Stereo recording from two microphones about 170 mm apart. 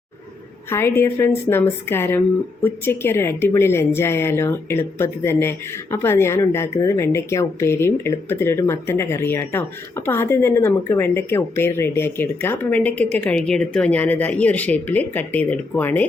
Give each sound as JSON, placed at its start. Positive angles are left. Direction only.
{"t": 0.7, "sound": "speech", "side_deg": 15}